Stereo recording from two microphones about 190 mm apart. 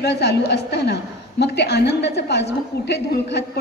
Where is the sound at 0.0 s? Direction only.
60° left (ahead or behind).